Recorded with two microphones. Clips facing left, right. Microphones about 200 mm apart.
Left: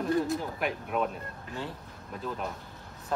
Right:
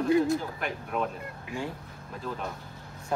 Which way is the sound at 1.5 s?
10° right (ahead or behind).